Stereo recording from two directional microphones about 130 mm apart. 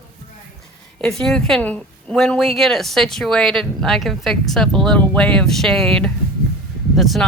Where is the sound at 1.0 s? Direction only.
5° left (ahead or behind).